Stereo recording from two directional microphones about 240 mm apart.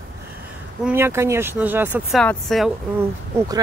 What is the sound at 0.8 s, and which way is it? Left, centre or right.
Speech, centre.